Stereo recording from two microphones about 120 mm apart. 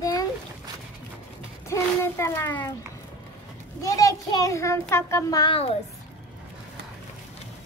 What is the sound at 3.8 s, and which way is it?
A child's voice, 30° left (ahead or behind).